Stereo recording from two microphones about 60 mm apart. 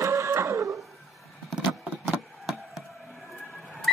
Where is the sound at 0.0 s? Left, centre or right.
Right.